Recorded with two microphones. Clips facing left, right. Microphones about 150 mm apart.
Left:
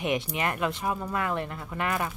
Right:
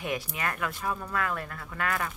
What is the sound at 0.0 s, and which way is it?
Speech, 20° left (ahead or behind).